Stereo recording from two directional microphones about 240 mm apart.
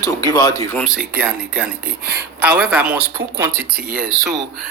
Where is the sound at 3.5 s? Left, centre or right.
Right.